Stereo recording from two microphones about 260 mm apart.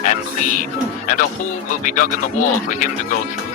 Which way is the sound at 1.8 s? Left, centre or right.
Left.